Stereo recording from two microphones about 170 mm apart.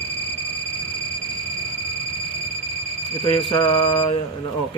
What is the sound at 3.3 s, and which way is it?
Mantra, 30° left (ahead or behind).